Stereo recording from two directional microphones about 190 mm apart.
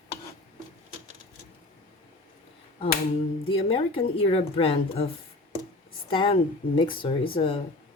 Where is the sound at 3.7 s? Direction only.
30° left (ahead or behind).